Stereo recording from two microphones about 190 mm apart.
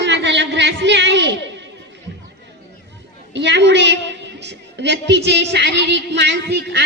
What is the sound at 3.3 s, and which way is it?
A woman's voice, 65° right (ahead or behind).